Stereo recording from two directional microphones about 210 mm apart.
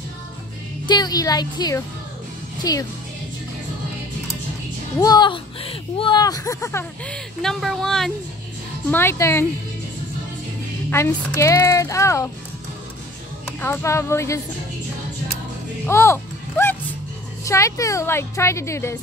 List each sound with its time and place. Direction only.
0.8 s speech: 20° left (ahead or behind)
5.0 s speech: 20° left (ahead or behind); by 8.1 s centre (ahead or behind)
8.9 s speech: 10° left (ahead or behind)
10.9 s speech: 15° left (ahead or behind)
13.6 s speech: 10° left (ahead or behind)
15.9 s a sound: 10° left (ahead or behind)
17.5 s speech: 15° left (ahead or behind)